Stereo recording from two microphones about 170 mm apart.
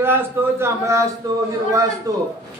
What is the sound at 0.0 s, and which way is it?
A man's voice, 15° right (ahead or behind).